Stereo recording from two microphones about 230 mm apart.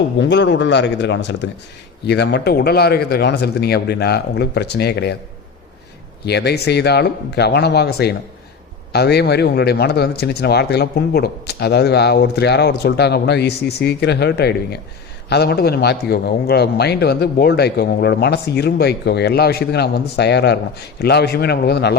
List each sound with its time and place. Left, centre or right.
0.2 s speech: left
6.2 s speech: left